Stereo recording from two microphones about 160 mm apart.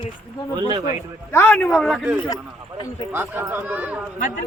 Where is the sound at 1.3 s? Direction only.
10° left (ahead or behind).